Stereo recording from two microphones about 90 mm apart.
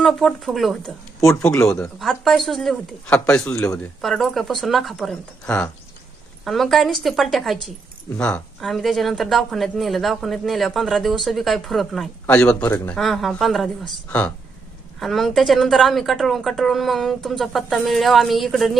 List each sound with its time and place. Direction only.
0.0 s speech: centre (ahead or behind)
3.5 s speech: 35° left (ahead or behind)
4.0 s speech: 5° left (ahead or behind)
6.4 s speech: centre (ahead or behind)
12.3 s speech: 10° left (ahead or behind)
12.6 s speech: 20° left (ahead or behind)
12.9 s speech: centre (ahead or behind)
15.0 s speech: centre (ahead or behind)